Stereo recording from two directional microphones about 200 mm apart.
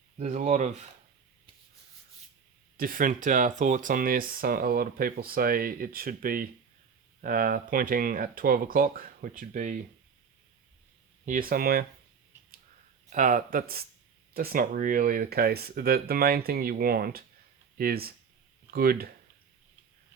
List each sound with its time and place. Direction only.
0.2 s speech: 35° right (ahead or behind)
2.7 s speech: 45° right (ahead or behind)
11.3 s speech: 45° right (ahead or behind)
13.1 s speech: 40° right (ahead or behind)